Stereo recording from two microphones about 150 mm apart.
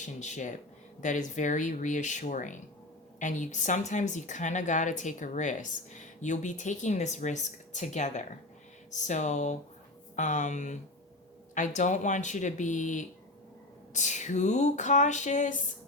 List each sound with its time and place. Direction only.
0.0 s a woman's voice: 55° left (ahead or behind)